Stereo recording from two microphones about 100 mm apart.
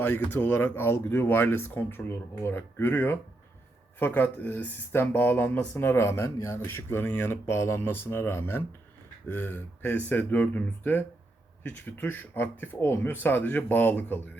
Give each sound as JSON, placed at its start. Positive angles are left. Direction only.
{"t": 0.3, "sound": "speech", "side_deg": 20}